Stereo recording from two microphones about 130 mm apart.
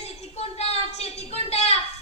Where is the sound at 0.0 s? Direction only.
55° left (ahead or behind).